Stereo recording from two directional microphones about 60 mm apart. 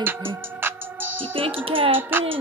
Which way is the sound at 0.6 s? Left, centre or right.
Right.